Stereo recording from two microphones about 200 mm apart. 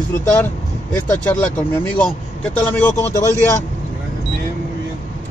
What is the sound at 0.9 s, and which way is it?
Speech, 5° left (ahead or behind).